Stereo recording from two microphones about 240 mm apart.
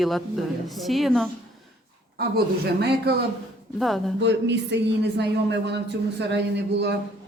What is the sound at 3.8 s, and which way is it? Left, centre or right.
Speech, centre.